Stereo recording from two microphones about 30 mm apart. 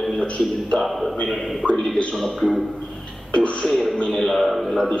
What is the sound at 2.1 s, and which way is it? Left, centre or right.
Speech, centre.